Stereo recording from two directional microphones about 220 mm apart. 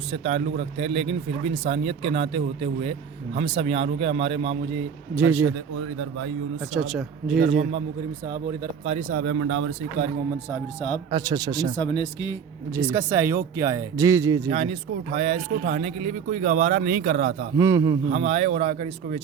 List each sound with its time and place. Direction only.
0.1 s speech: 30° right (ahead or behind)
5.2 s a man's voice: 65° right (ahead or behind)
6.7 s speech: centre (ahead or behind)
8.8 s speech: 30° right (ahead or behind)
9.2 s speech: 65° right (ahead or behind)
10.8 s a man's voice: 30° left (ahead or behind)
11.1 s speech: 15° right (ahead or behind)
11.8 s speech: 25° left (ahead or behind)
12.7 s speech: 10° right (ahead or behind)
14.5 s speech: 25° right (ahead or behind)
15.4 s speech: 45° right (ahead or behind)
17.6 s speech: 15° right (ahead or behind)
18.1 s speech: 30° right (ahead or behind)